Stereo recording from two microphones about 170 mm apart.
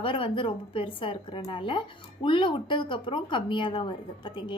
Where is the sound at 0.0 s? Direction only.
30° left (ahead or behind).